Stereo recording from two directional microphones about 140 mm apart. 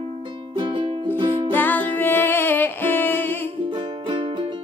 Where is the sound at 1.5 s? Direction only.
15° left (ahead or behind).